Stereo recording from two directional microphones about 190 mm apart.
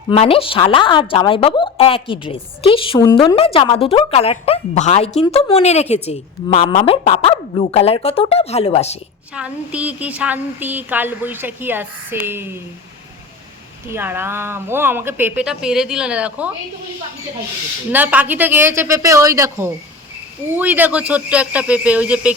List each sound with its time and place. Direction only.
0.1 s a woman's voice: 30° left (ahead or behind)
9.3 s speech: 5° right (ahead or behind)
13.9 s speech: 10° right (ahead or behind)
17.9 s speech: 10° right (ahead or behind)